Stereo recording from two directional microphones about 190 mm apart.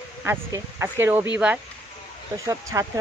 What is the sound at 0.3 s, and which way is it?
Speech, 15° right (ahead or behind).